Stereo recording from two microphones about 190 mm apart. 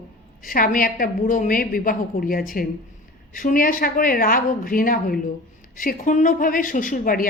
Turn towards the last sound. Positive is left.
turn(degrees=45)  # may be behind; listen again after turning